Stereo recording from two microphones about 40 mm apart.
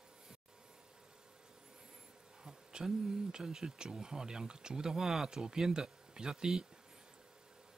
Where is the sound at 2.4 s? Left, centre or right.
Centre.